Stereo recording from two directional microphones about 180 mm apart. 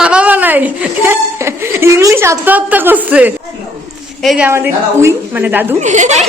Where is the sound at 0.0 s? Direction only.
5° right (ahead or behind).